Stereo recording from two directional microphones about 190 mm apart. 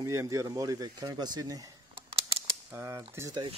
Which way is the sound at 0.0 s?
15° right (ahead or behind).